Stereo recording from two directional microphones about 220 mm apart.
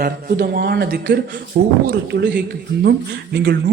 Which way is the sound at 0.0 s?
45° right (ahead or behind).